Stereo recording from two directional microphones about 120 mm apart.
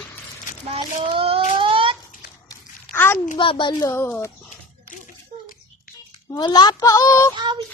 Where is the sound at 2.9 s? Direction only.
20° left (ahead or behind).